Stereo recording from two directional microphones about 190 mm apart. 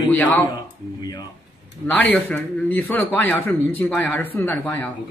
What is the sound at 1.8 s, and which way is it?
A man's voice, 5° left (ahead or behind).